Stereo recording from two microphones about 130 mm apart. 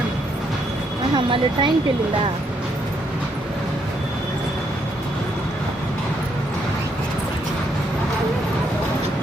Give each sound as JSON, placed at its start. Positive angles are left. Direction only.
{"t": 1.1, "sound": "speech", "side_deg": -40}